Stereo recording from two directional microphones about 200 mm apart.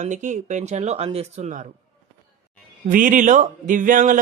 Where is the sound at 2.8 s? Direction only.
40° right (ahead or behind).